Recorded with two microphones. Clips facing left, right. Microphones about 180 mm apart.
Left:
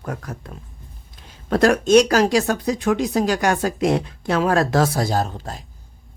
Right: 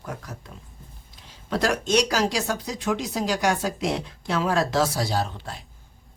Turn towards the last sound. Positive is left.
turn(degrees=40)  # may be behind; listen again after turning